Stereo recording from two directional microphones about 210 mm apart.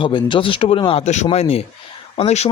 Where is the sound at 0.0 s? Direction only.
25° left (ahead or behind).